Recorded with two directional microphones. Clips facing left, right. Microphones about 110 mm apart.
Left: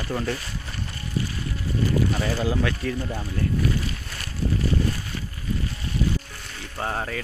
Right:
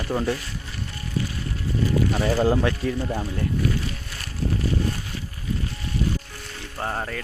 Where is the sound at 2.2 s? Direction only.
30° right (ahead or behind).